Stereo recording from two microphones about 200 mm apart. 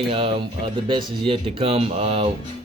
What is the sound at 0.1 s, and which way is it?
Speech, 25° right (ahead or behind).